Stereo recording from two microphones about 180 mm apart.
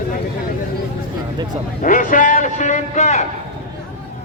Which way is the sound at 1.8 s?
45° left (ahead or behind).